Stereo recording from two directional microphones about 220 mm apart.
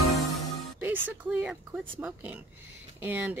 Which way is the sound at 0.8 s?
10° right (ahead or behind).